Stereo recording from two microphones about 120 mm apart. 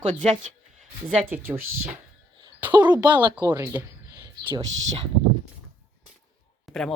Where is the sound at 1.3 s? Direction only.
20° right (ahead or behind).